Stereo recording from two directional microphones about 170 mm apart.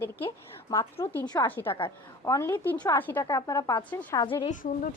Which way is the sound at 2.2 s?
15° left (ahead or behind).